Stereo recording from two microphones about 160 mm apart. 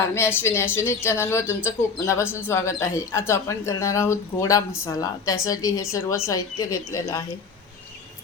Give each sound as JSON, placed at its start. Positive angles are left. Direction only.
{"t": 0.1, "sound": "a woman's voice", "side_deg": 15}